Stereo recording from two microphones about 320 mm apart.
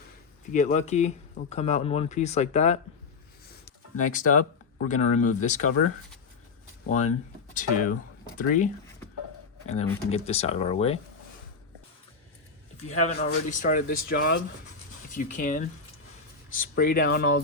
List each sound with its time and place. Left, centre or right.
0.5 s speech: left
3.9 s speech: left
6.9 s speech: left
12.7 s speech: left